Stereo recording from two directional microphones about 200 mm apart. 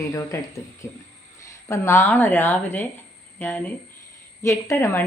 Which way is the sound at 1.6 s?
15° left (ahead or behind).